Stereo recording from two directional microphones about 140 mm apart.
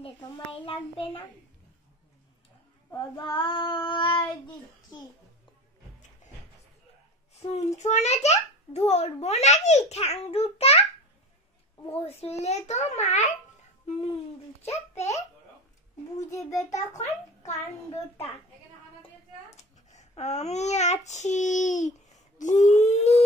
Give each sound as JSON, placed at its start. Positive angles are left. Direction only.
{"t": 0.5, "sound": "child singing", "side_deg": 40}
{"t": 3.0, "sound": "child singing", "side_deg": 35}
{"t": 7.3, "sound": "a child's voice", "side_deg": 55}
{"t": 11.9, "sound": "a child's voice", "side_deg": 45}
{"t": 14.6, "sound": "a child's voice", "side_deg": 50}
{"t": 16.3, "sound": "a child's voice", "side_deg": 20}
{"t": 19.5, "sound": "a child's voice", "side_deg": 55}